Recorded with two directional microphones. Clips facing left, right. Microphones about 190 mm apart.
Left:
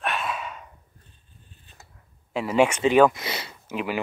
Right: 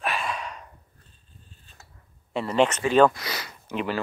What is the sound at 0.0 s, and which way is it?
Gasp, centre (ahead or behind).